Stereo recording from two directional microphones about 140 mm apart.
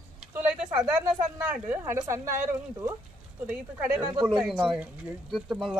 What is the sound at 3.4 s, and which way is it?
Speech, 10° right (ahead or behind).